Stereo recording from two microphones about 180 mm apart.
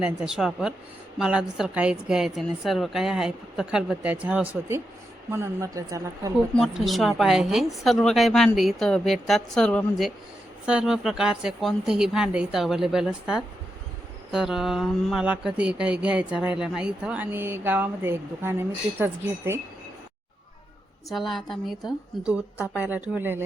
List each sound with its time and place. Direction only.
0.0 s speech: 5° right (ahead or behind)
6.6 s speech: centre (ahead or behind)
21.1 s speech: centre (ahead or behind)